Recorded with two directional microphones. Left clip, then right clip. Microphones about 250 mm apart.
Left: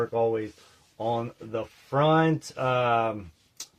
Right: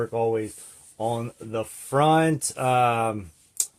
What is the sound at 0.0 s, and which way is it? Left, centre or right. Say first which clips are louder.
Speech: right 1 dB; right.